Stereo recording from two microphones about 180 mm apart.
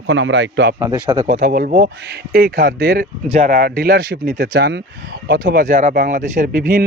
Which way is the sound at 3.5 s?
55° right (ahead or behind).